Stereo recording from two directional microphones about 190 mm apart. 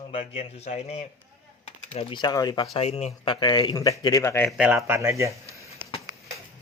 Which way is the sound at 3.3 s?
20° left (ahead or behind).